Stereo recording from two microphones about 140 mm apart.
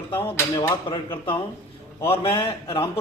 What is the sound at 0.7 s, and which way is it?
Speech, 35° left (ahead or behind).